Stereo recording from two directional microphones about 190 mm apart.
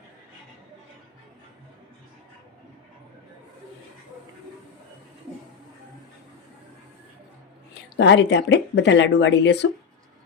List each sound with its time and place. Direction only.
7.7 s speech: 65° left (ahead or behind)